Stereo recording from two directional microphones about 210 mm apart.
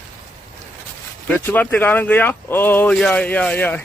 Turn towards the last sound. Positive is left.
turn(degrees=10)  # may be behind; listen again after turning